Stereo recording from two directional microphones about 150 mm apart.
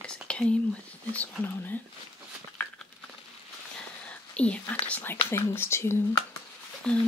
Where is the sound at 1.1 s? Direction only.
10° left (ahead or behind).